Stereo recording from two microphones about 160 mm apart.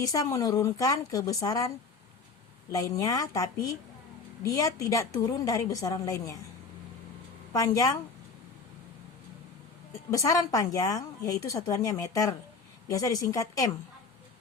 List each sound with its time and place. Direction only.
0.0 s a woman's voice: 20° left (ahead or behind)
2.7 s a woman's voice: 20° left (ahead or behind)
7.5 s a woman's voice: 20° left (ahead or behind)
10.1 s a woman's voice: 20° left (ahead or behind)